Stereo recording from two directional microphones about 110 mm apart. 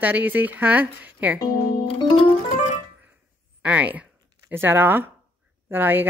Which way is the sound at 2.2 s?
75° left (ahead or behind).